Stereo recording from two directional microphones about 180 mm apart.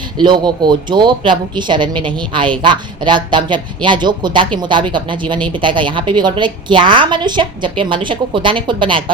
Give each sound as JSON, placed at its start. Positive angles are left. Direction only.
{"t": 0.2, "sound": "a woman's voice", "side_deg": -25}